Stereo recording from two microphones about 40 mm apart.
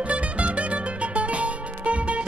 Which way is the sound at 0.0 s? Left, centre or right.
Right.